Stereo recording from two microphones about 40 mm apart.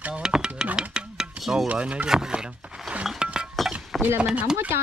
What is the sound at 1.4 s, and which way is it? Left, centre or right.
Stir, centre.